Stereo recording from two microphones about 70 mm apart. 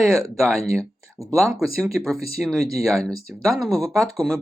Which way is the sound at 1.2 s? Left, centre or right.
Right.